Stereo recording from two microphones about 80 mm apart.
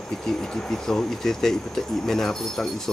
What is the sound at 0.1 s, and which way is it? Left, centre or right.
Speech, centre.